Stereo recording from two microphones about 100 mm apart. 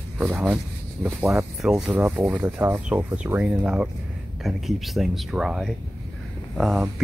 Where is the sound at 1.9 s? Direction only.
25° right (ahead or behind).